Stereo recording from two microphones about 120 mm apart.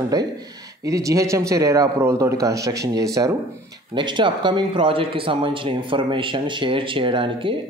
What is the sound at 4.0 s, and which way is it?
Speech, 40° right (ahead or behind).